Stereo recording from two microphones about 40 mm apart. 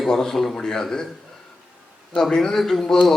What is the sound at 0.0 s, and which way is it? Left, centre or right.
A man's voice, centre.